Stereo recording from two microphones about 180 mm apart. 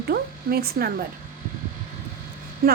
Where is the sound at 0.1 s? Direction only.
60° right (ahead or behind).